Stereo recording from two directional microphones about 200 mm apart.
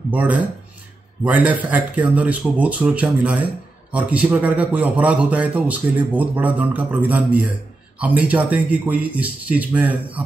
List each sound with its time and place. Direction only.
0.1 s a man's voice: 10° right (ahead or behind)